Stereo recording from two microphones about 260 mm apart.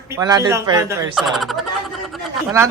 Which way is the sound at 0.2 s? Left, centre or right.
Centre.